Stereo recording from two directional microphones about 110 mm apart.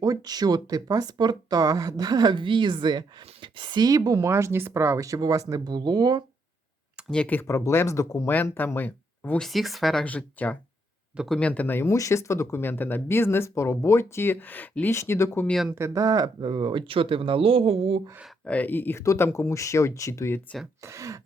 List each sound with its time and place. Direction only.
0.0 s speech: 35° right (ahead or behind)
7.1 s speech: 10° left (ahead or behind)
7.4 s speech: 30° left (ahead or behind)
8.3 s speech: 15° left (ahead or behind)
9.4 s speech: centre (ahead or behind); by 15.4 s 25° left (ahead or behind)
15.7 s speech: 25° right (ahead or behind); by 18.0 s 60° right (ahead or behind)
18.4 s speech: 15° left (ahead or behind)
20.8 s speech: 25° right (ahead or behind)